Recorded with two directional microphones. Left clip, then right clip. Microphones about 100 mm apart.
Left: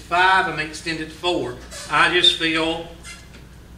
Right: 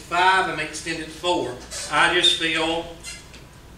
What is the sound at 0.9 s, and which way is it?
Speech, 30° left (ahead or behind).